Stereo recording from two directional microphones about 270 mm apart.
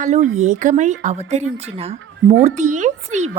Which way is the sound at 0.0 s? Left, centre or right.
Right.